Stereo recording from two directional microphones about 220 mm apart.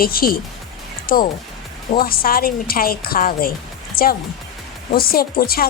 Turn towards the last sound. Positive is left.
turn(degrees=45)  # may be behind; listen again after turning